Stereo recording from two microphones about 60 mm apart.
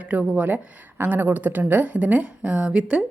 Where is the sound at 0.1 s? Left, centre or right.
Right.